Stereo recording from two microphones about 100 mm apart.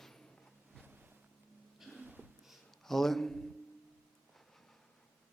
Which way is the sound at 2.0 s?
15° right (ahead or behind).